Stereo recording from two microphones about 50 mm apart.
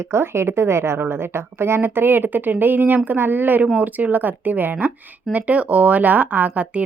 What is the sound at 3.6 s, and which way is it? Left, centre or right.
A woman's voice, right.